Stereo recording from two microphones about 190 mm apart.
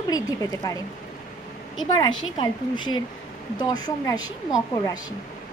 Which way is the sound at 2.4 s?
25° left (ahead or behind).